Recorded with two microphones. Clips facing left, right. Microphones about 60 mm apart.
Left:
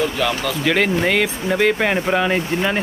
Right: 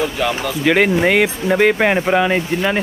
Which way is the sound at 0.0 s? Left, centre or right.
Centre.